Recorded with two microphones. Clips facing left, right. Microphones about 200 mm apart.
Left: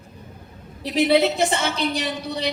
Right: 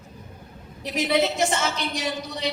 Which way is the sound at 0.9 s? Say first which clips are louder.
Left 5 dB; 30° left (ahead or behind).